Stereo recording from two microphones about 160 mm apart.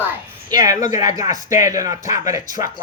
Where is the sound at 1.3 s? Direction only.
50° left (ahead or behind).